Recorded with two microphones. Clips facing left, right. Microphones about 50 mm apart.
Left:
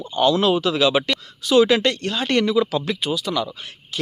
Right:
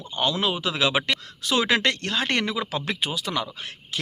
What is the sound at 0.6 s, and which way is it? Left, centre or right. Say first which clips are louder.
A man's voice: left 5 dB; right.